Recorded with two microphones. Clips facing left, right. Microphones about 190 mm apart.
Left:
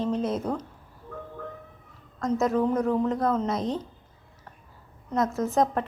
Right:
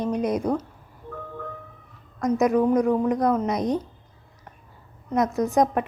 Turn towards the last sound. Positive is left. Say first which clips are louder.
# right 3 dB
turn(degrees=-15)  # may be behind; listen again after turning